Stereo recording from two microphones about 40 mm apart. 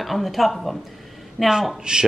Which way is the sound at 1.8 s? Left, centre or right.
Centre.